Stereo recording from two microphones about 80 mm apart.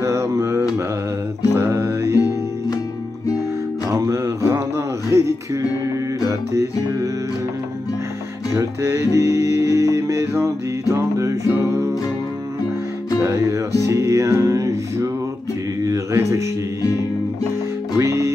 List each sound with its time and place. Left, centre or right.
0.0 s mantra: right
1.5 s music: right
3.9 s a sound: right
8.5 s music: right
13.2 s music: right
15.8 s a sound: right
17.9 s music: right